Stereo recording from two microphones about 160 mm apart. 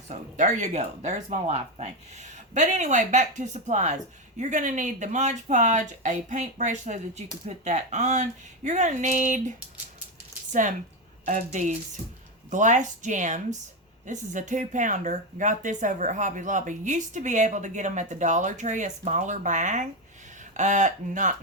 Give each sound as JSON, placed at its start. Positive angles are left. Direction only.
{"t": 0.1, "sound": "speech", "side_deg": -50}
{"t": 10.5, "sound": "speech", "side_deg": -50}